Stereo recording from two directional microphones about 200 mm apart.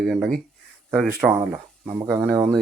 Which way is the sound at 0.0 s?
Centre (ahead or behind).